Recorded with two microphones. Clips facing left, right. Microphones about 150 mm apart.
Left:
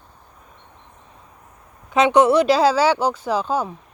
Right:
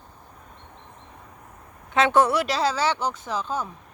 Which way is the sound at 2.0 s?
20° left (ahead or behind).